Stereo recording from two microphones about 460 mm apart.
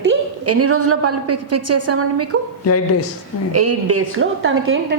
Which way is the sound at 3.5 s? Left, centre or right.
Right.